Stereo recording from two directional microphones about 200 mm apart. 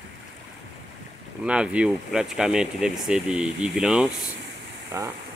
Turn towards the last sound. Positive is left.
turn(degrees=-15)  # may be behind; listen again after turning